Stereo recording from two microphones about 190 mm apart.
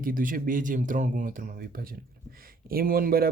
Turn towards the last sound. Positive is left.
turn(degrees=-50)  # may be behind; listen again after turning